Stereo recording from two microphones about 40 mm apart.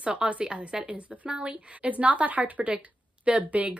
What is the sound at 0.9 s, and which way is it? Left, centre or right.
Speech, right.